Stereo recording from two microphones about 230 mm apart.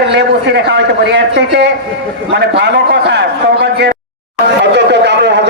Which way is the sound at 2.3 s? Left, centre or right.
Right.